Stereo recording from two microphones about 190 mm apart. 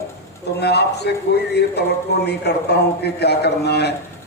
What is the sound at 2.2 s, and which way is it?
A man's voice, 60° left (ahead or behind).